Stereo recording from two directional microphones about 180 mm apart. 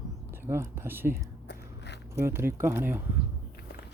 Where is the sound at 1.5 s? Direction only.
70° left (ahead or behind).